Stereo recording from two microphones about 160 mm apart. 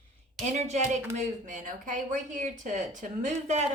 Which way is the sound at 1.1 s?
50° right (ahead or behind).